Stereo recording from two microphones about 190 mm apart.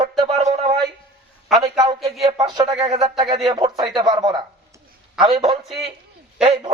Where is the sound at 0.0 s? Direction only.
30° right (ahead or behind).